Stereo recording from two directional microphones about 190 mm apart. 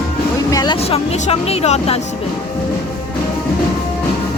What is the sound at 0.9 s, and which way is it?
Speech, 30° left (ahead or behind).